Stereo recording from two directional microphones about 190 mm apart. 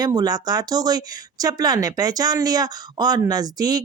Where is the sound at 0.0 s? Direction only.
20° right (ahead or behind).